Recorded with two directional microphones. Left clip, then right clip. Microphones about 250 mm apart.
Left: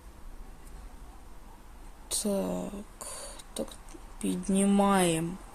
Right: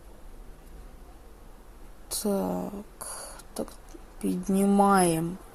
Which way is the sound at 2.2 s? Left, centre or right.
Centre.